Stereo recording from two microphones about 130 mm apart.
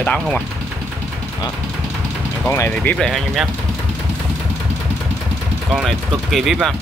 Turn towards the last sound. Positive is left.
turn(degrees=0)  # may be behind; listen again after turning